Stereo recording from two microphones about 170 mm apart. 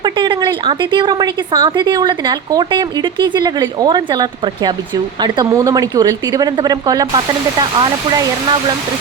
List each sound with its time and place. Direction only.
0.0 s a woman's voice: 25° right (ahead or behind)